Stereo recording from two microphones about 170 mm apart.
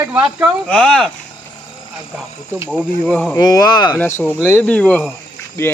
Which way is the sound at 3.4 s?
20° left (ahead or behind).